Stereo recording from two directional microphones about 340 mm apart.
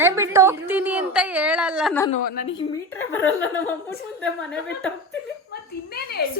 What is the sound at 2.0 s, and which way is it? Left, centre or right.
Speech, left.